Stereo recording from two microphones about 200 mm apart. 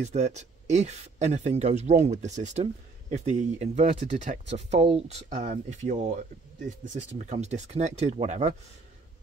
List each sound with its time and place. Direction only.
0.0 s speech: 35° right (ahead or behind)